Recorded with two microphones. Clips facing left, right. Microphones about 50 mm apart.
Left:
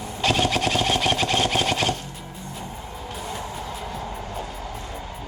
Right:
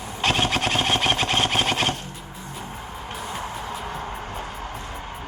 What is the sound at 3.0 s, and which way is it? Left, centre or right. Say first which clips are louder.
Music: right 1 dB; right.